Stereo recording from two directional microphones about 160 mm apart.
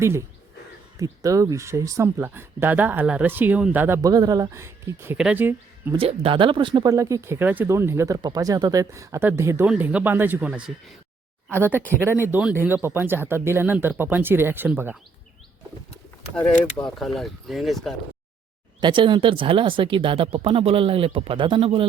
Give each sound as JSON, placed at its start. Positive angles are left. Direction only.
{"t": 0.0, "sound": "speech", "side_deg": -15}
{"t": 5.9, "sound": "speech", "side_deg": -35}
{"t": 17.0, "sound": "speech", "side_deg": 0}
{"t": 18.8, "sound": "speech", "side_deg": -30}